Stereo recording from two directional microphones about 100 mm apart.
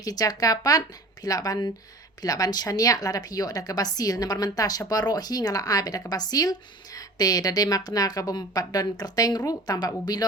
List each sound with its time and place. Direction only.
0.0 s a woman's voice: 40° left (ahead or behind)